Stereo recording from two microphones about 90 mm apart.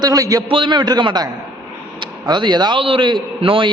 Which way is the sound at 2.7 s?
75° right (ahead or behind).